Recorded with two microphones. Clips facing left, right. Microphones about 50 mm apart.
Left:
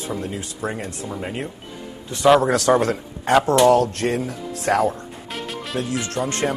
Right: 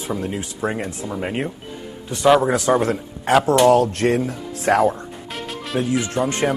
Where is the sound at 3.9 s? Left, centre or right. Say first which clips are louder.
Right 4 dB; right.